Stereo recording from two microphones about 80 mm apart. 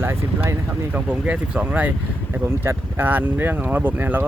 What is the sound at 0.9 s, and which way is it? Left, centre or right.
Speech, centre.